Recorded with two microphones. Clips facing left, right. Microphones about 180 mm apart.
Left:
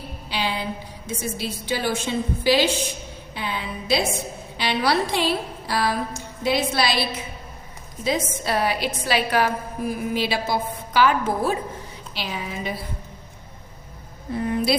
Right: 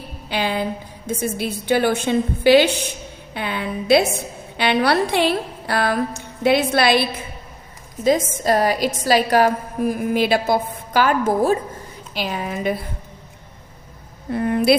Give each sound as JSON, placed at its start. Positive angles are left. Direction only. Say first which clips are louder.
{"t": 0.3, "sound": "a woman's voice", "louder": "right 5 dB", "side_deg": -50}
{"t": 8.0, "sound": "a woman's voice", "louder": "right 7 dB", "side_deg": -45}
{"t": 10.1, "sound": "a woman's voice", "louder": "right 7 dB", "side_deg": -50}
{"t": 14.3, "sound": "a woman's voice", "louder": "right 6 dB", "side_deg": -65}